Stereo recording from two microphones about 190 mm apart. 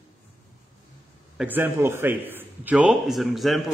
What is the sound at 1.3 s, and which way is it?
A man's voice, 10° right (ahead or behind).